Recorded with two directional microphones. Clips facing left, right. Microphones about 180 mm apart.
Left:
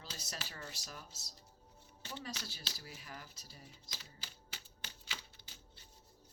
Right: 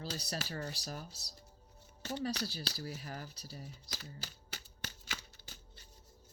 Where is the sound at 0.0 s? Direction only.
35° right (ahead or behind).